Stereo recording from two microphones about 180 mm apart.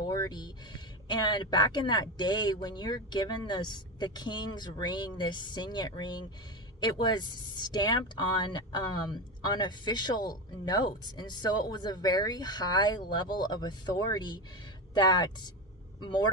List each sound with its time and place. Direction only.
0.0 s speech: 20° left (ahead or behind)